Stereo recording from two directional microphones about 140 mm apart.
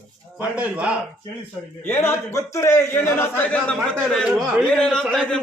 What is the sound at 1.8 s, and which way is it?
A man's voice, 15° left (ahead or behind).